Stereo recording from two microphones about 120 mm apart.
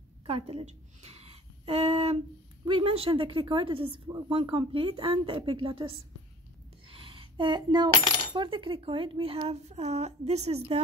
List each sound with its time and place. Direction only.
0.3 s a woman's voice: 55° right (ahead or behind)
6.9 s a sound: 45° right (ahead or behind)
8.4 s a woman's voice: 45° right (ahead or behind); by 10.8 s 60° right (ahead or behind)